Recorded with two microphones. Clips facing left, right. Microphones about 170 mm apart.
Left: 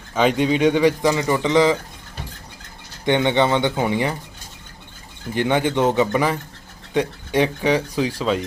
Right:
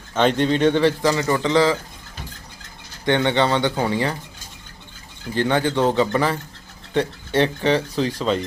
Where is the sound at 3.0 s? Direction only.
15° left (ahead or behind).